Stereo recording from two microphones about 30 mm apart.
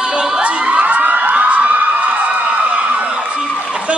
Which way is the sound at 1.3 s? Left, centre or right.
Right.